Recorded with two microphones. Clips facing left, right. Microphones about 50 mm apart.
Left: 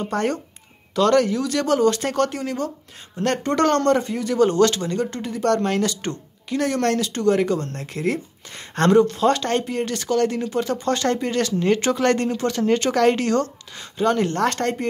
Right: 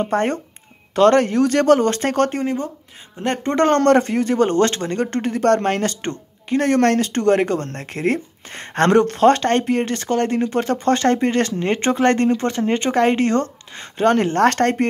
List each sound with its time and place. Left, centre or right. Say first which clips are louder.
0.0 s speech: right 4 dB; right
3.2 s speech: right 1 dB; right
3.8 s speech: right 5 dB; right
4.3 s speech: left 2 dB; right